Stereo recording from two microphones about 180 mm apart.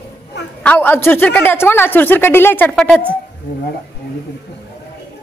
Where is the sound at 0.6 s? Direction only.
10° left (ahead or behind).